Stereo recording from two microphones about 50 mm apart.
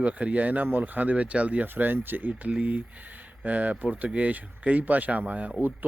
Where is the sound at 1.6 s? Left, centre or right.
Right.